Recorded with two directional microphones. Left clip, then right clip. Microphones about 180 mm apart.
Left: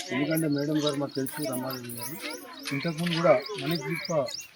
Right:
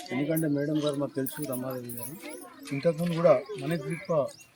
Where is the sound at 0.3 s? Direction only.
25° right (ahead or behind).